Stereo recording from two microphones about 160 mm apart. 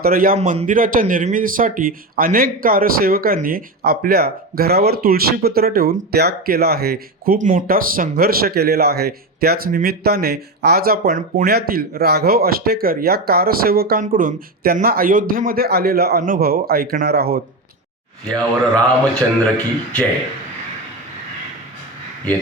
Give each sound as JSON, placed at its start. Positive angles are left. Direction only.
{"t": 0.0, "sound": "a man's voice", "side_deg": -65}
{"t": 0.3, "sound": "speech", "side_deg": -50}
{"t": 18.3, "sound": "speech", "side_deg": 5}